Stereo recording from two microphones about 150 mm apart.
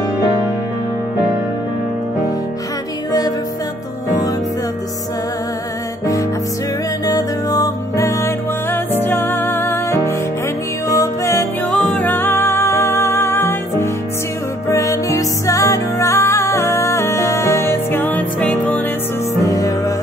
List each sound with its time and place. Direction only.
3.1 s music: 25° left (ahead or behind)
7.1 s music: 25° left (ahead or behind)
11.7 s music: 5° left (ahead or behind)
19.4 s music: 25° left (ahead or behind)